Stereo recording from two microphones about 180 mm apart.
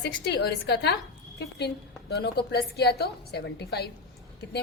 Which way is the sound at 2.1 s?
65° left (ahead or behind).